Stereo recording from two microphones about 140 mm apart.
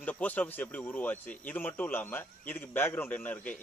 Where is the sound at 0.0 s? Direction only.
10° left (ahead or behind).